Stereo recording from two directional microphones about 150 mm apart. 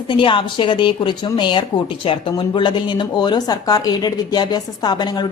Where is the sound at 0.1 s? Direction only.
35° left (ahead or behind).